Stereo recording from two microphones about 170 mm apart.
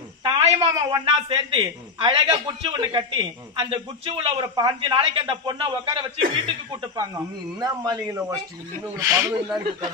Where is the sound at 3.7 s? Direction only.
35° right (ahead or behind).